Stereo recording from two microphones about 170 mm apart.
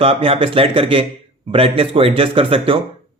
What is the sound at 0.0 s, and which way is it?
Speech, 35° right (ahead or behind).